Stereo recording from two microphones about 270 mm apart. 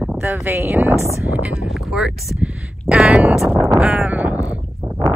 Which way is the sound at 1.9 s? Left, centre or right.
Centre.